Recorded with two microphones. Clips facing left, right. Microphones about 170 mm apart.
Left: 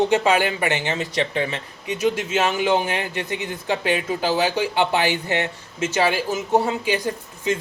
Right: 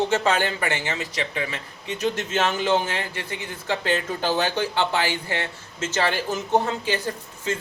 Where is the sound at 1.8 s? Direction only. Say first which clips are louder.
Left 4 dB; 10° left (ahead or behind).